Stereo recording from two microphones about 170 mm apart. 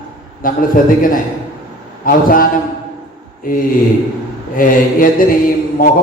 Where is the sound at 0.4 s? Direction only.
55° left (ahead or behind).